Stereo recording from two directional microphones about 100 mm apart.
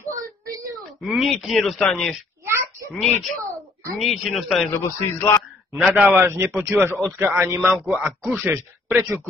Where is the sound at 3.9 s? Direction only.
Centre (ahead or behind).